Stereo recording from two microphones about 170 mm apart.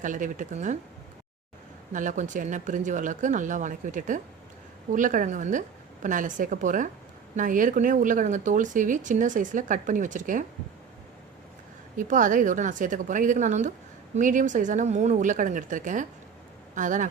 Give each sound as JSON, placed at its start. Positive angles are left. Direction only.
{"t": 0.0, "sound": "speech", "side_deg": -50}
{"t": 1.9, "sound": "speech", "side_deg": -50}
{"t": 11.9, "sound": "speech", "side_deg": -50}